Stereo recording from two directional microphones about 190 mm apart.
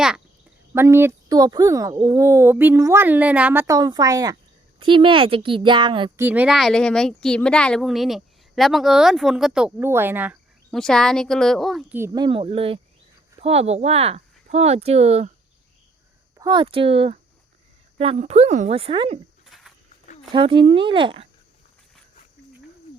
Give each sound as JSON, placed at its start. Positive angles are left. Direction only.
{"t": 0.7, "sound": "a woman's voice", "side_deg": -15}
{"t": 6.1, "sound": "speech", "side_deg": -10}
{"t": 10.7, "sound": "speech", "side_deg": 5}
{"t": 11.9, "sound": "a woman's voice", "side_deg": -15}
{"t": 16.4, "sound": "a woman's voice", "side_deg": -25}
{"t": 19.5, "sound": "wild animals", "side_deg": 0}
{"t": 20.3, "sound": "a woman's voice", "side_deg": -25}